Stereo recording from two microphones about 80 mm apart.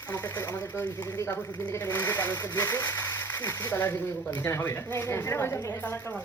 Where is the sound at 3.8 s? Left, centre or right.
Left.